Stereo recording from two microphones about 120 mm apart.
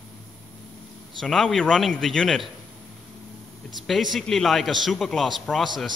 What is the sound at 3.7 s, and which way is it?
Speech, centre (ahead or behind).